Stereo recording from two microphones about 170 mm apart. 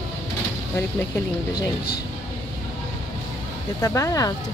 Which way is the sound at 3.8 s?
20° left (ahead or behind).